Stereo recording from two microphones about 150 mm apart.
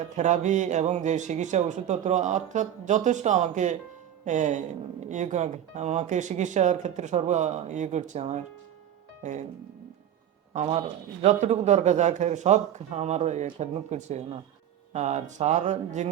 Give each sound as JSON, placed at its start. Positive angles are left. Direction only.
{"t": 0.0, "sound": "speech", "side_deg": -50}
{"t": 10.5, "sound": "speech", "side_deg": -45}